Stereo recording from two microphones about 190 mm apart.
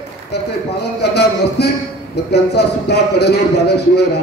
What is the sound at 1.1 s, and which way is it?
A man's voice, 60° left (ahead or behind).